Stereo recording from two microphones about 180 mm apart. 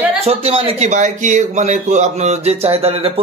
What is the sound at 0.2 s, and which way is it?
Speech, 35° right (ahead or behind).